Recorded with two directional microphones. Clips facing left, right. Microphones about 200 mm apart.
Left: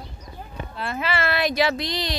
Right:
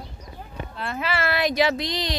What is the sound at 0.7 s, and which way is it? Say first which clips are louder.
Speech: left 1 dB; 5° left (ahead or behind).